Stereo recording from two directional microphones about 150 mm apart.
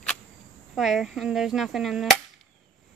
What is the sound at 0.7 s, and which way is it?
Speech, centre (ahead or behind).